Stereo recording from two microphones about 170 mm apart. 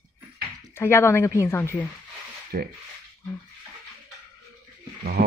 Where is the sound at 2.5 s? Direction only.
65° right (ahead or behind).